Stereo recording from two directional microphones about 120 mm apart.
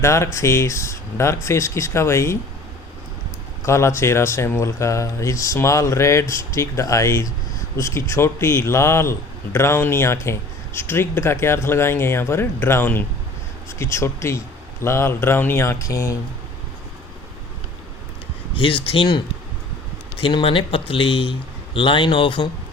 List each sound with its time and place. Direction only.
0.0 s speech: 25° left (ahead or behind)
3.7 s speech: 20° left (ahead or behind)
18.5 s speech: 45° left (ahead or behind)
20.2 s speech: 45° left (ahead or behind)